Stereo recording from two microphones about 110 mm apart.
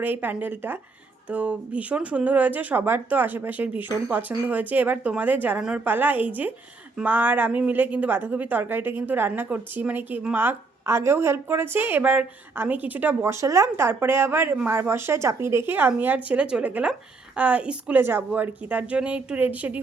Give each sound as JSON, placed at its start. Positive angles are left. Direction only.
{"t": 0.0, "sound": "a woman's voice", "side_deg": -15}